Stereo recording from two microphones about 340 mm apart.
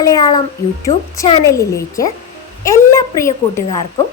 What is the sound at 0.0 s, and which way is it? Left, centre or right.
A woman's voice, centre.